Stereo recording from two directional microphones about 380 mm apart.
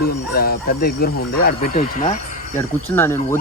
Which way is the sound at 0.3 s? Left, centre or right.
Left.